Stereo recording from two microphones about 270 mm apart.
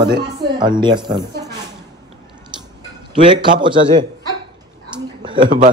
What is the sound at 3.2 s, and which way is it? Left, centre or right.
Speech, centre.